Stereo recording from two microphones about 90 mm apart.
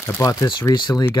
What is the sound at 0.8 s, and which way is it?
Speech, 60° left (ahead or behind).